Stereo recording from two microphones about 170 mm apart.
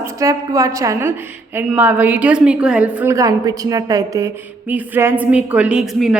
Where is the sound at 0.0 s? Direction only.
20° right (ahead or behind).